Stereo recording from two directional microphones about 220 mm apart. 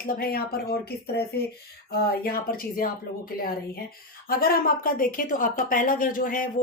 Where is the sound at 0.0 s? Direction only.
40° left (ahead or behind).